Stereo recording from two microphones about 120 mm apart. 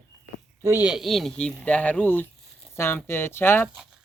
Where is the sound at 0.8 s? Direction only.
5° right (ahead or behind).